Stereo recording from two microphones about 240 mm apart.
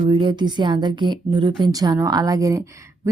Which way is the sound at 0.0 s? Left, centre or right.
Right.